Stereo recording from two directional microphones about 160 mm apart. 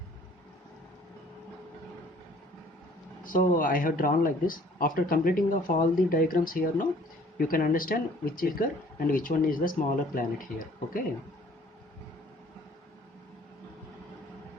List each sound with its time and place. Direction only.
3.2 s speech: 60° left (ahead or behind)